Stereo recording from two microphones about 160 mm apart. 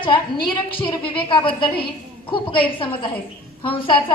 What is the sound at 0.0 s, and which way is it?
A woman's voice, 30° left (ahead or behind).